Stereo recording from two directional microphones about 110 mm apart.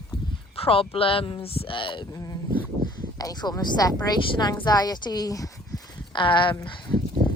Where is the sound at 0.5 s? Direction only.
60° left (ahead or behind).